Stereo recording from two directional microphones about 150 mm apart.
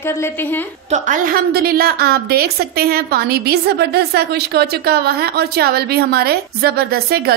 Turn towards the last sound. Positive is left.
turn(degrees=-90)